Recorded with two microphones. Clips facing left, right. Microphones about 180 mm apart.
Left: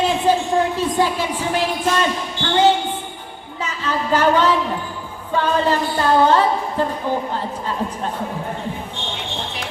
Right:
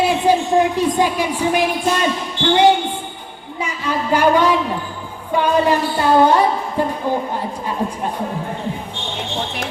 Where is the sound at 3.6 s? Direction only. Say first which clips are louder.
Right 2 dB; 10° right (ahead or behind).